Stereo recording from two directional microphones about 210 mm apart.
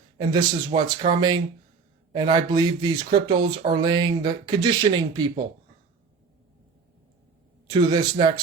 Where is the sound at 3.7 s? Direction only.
20° right (ahead or behind).